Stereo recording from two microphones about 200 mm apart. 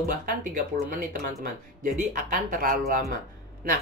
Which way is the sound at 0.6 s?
45° right (ahead or behind).